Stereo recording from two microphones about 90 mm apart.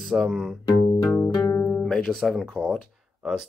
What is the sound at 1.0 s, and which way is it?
Music, 30° left (ahead or behind).